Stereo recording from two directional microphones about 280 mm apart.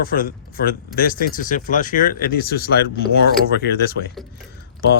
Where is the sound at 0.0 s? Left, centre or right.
Left.